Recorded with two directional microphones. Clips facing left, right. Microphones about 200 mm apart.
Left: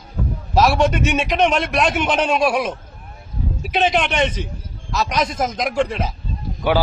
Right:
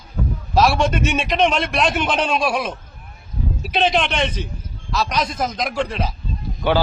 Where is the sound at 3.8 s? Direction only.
10° left (ahead or behind).